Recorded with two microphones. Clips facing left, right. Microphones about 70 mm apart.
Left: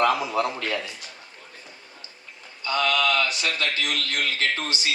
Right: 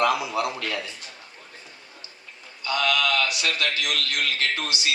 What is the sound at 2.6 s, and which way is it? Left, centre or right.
A man's voice, left.